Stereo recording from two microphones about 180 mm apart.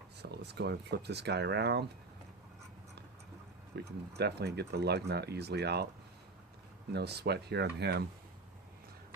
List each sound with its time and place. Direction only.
0.2 s speech: 70° right (ahead or behind)
3.7 s speech: 65° right (ahead or behind)
6.9 s speech: 65° right (ahead or behind)